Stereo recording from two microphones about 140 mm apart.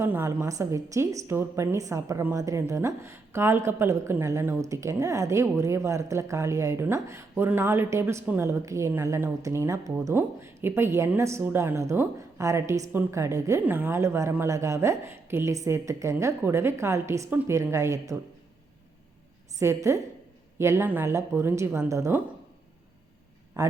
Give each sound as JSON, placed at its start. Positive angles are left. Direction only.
{"t": 0.0, "sound": "a woman's voice", "side_deg": -15}
{"t": 19.5, "sound": "a woman's voice", "side_deg": -20}